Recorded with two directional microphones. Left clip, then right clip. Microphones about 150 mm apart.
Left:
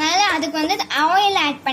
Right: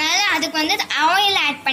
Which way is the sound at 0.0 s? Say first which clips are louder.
Left 1 dB; 40° left (ahead or behind).